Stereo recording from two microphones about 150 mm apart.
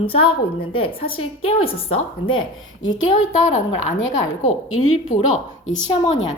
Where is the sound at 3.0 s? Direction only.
50° left (ahead or behind).